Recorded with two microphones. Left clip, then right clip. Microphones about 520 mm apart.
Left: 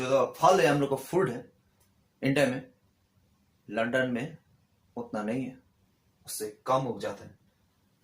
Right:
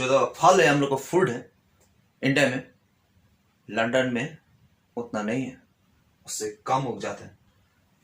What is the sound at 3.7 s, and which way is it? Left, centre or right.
Speech, left.